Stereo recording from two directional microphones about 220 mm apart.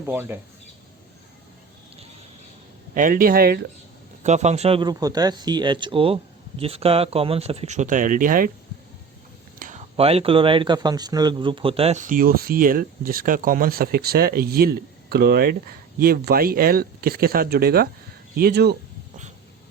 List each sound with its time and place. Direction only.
0.0 s speech: 10° right (ahead or behind)
2.9 s speech: 40° right (ahead or behind)
4.2 s speech: 30° right (ahead or behind)
9.6 s speech: 35° right (ahead or behind)